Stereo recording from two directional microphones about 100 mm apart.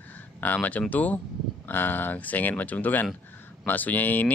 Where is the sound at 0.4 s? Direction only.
15° left (ahead or behind).